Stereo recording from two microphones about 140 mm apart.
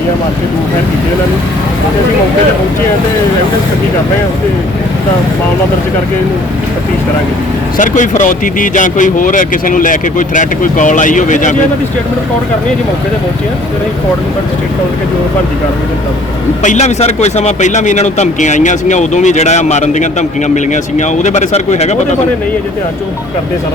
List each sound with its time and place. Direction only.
7.8 s speech: 65° left (ahead or behind)
16.6 s speech: 55° left (ahead or behind)